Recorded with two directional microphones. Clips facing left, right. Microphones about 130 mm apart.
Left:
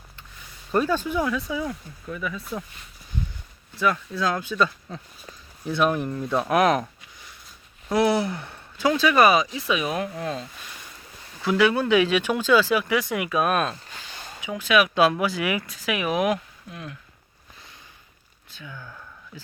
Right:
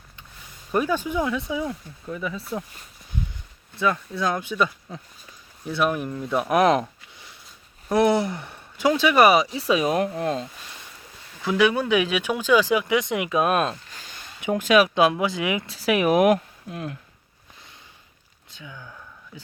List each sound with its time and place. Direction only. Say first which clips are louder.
0.7 s speech: even; 10° right (ahead or behind)
3.8 s speech: even; 20° right (ahead or behind)
5.6 s speech: left 1 dB; 5° right (ahead or behind); by 6.8 s 20° right (ahead or behind)
7.9 s speech: right 2 dB; 20° right (ahead or behind)
9.6 s speech: right 4 dB; 35° right (ahead or behind)
11.5 s speech: left 1 dB; 15° right (ahead or behind)
14.4 s speech: right 3 dB; 45° right (ahead or behind)
14.9 s speech: even; 20° right (ahead or behind); by 17.0 s 40° right (ahead or behind)
18.5 s a sound: left 1 dB; 15° right (ahead or behind)